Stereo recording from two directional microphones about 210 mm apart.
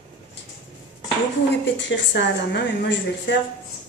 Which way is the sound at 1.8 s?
60° left (ahead or behind).